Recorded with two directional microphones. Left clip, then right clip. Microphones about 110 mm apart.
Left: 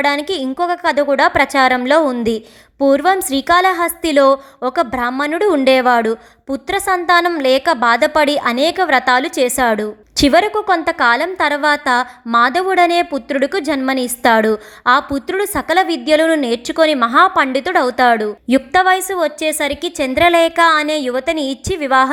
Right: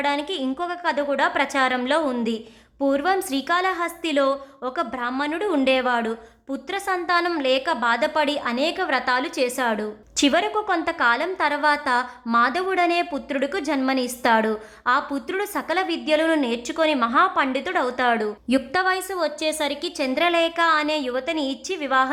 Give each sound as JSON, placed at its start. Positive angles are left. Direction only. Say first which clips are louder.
{"t": 0.0, "sound": "a woman's voice", "louder": "left 7 dB", "side_deg": 50}